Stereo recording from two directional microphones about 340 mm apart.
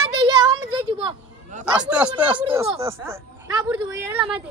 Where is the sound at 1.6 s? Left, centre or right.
Centre.